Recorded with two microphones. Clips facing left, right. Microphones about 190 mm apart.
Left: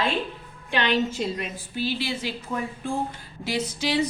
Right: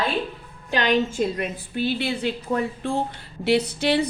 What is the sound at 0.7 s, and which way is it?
A woman's voice, 45° right (ahead or behind).